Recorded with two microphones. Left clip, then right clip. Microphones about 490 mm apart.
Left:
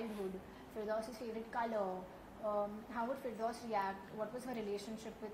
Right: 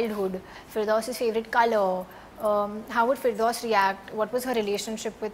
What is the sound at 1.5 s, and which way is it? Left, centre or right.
A woman's voice, right.